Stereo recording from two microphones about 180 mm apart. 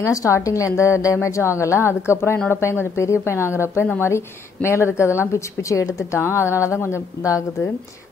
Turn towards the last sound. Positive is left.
turn(degrees=15)  # may be behind; listen again after turning